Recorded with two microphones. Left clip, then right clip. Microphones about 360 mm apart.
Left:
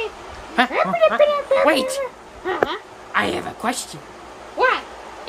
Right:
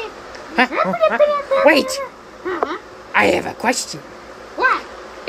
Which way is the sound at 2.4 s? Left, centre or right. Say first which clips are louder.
Left 1 dB; left.